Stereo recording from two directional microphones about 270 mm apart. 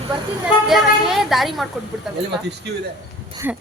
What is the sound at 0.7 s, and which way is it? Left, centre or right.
Speech, centre.